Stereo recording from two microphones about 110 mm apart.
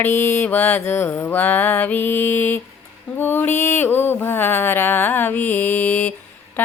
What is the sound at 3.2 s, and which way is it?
Mantra, 20° left (ahead or behind).